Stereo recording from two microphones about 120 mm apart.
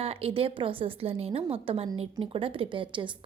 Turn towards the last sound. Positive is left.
turn(degrees=-45)  # may be behind; listen again after turning